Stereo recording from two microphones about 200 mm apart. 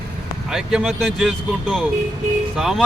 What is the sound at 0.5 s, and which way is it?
Speech, 5° right (ahead or behind).